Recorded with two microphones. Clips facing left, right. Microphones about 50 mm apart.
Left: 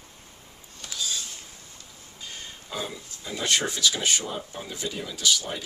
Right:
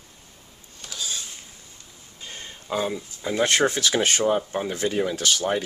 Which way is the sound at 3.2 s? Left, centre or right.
Right.